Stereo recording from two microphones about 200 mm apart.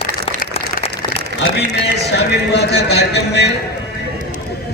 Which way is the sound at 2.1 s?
55° left (ahead or behind).